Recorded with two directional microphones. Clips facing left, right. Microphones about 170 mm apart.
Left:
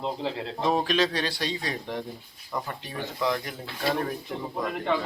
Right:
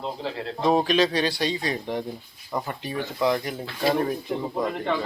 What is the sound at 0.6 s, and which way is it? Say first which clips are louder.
Speech: right 4 dB; centre (ahead or behind).